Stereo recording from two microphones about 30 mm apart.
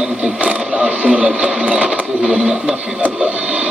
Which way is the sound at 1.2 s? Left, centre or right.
Right.